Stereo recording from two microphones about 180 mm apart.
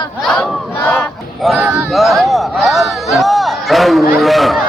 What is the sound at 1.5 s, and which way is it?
Speech, 10° right (ahead or behind).